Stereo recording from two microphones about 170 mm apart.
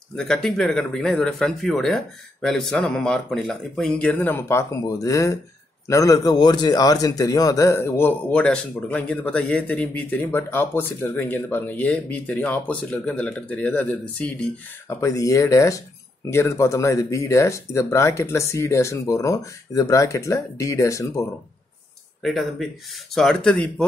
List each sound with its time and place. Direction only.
0.1 s a man's voice: 5° left (ahead or behind)
22.2 s speech: centre (ahead or behind)